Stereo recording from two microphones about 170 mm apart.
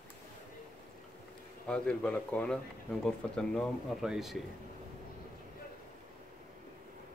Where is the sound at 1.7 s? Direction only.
5° left (ahead or behind).